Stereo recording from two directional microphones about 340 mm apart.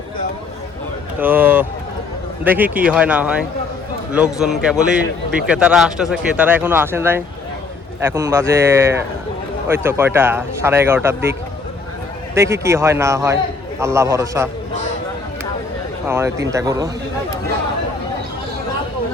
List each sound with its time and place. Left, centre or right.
1.2 s a sound: centre
2.4 s a man's voice: centre
16.0 s a man's voice: centre